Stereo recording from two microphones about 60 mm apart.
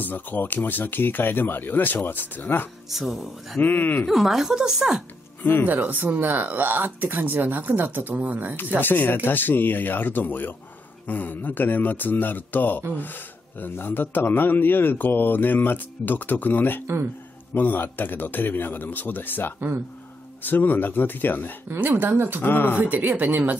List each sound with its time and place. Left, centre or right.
0.0 s a man's voice: left
2.9 s speech: centre
3.6 s a man's voice: left
4.1 s speech: centre
5.4 s speech: left
5.7 s speech: right
8.8 s a man's voice: left
16.8 s speech: right
17.6 s a man's voice: left
21.6 s speech: right
22.4 s a man's voice: left
22.8 s speech: right